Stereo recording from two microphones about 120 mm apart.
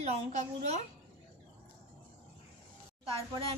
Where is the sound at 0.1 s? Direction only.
65° right (ahead or behind).